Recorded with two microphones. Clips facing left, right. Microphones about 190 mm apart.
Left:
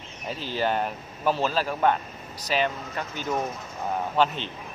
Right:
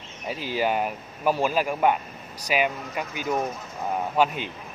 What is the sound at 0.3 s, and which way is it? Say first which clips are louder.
Speech: right 1 dB; 10° right (ahead or behind).